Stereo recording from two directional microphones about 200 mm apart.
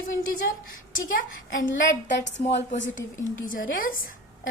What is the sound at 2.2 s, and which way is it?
Speech, 65° left (ahead or behind).